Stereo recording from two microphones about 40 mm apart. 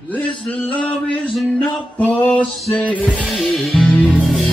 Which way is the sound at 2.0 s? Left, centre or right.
Left.